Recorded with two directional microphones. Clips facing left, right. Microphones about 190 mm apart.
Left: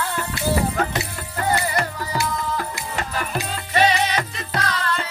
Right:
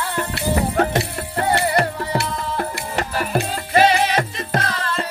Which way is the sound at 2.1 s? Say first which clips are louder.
Even; 55° right (ahead or behind).